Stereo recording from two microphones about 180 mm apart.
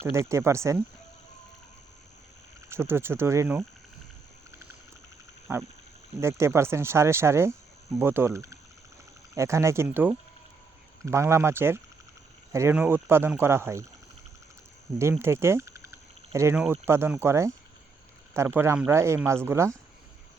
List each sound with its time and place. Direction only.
0.0 s speech: 15° right (ahead or behind)
2.6 s speech: 15° right (ahead or behind)
5.5 s speech: 15° right (ahead or behind)
15.2 s a sound: 15° right (ahead or behind)
16.8 s speech: 15° right (ahead or behind)